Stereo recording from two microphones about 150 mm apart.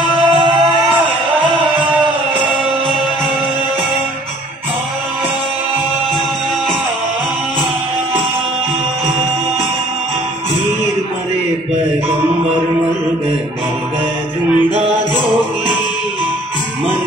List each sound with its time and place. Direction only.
0.1 s music: 30° right (ahead or behind)